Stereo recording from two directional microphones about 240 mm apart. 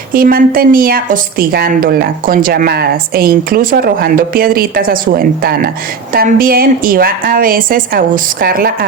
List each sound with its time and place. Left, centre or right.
0.1 s a woman's voice: right